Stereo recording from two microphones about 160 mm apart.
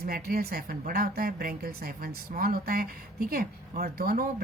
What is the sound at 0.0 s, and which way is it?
A woman's voice, 70° right (ahead or behind).